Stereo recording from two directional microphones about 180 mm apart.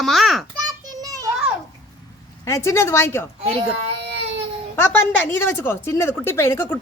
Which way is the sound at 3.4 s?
35° right (ahead or behind).